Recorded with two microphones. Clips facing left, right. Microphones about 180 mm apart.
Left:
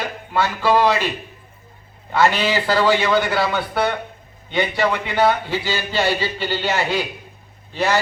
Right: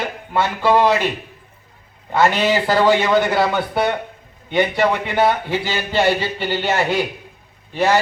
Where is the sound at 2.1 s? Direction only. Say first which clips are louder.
Right 2 dB; 15° right (ahead or behind).